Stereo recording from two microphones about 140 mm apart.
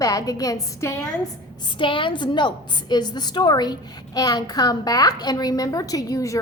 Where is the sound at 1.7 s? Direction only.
35° left (ahead or behind).